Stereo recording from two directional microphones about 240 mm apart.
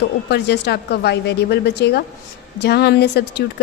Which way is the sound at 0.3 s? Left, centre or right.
Left.